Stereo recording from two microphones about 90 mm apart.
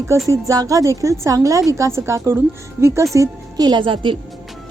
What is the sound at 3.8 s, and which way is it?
Speech, 65° right (ahead or behind).